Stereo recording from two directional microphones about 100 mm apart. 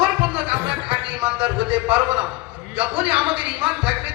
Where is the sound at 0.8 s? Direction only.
15° right (ahead or behind).